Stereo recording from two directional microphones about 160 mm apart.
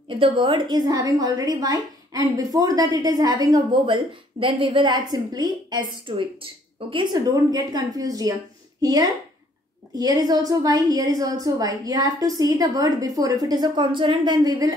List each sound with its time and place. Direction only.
0.1 s a woman's voice: 35° right (ahead or behind)